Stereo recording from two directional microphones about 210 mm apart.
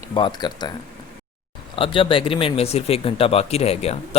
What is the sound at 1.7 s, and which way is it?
Speech, 25° left (ahead or behind).